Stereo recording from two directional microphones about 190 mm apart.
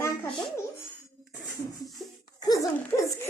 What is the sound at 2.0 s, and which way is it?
Laughter, centre (ahead or behind).